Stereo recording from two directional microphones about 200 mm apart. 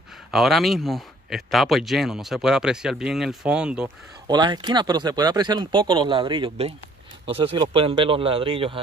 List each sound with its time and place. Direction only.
0.3 s speech: centre (ahead or behind)
4.3 s speech: 25° right (ahead or behind)